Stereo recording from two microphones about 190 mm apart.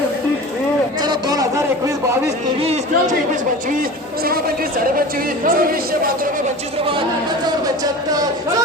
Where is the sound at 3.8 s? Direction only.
50° right (ahead or behind).